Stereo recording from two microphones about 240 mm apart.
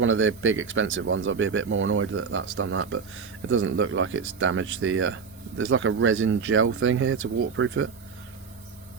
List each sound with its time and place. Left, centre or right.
0.0 s speech: right